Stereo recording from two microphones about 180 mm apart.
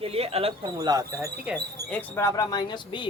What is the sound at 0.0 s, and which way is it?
Speech, 35° right (ahead or behind).